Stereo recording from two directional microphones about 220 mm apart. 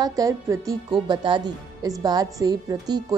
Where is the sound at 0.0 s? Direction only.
15° right (ahead or behind).